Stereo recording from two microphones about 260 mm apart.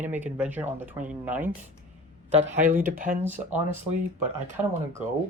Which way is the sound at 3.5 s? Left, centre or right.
Centre.